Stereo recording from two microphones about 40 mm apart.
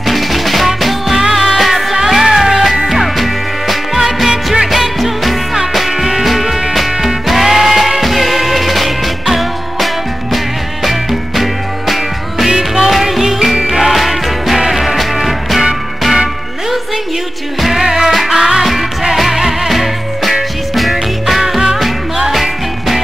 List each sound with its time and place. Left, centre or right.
0.0 s music: centre
12.4 s music: centre
13.9 s music: centre
17.6 s music: centre